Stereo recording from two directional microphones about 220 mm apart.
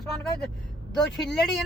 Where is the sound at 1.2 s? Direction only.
Centre (ahead or behind).